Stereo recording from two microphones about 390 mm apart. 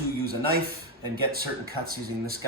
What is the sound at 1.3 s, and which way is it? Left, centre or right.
Speech, right.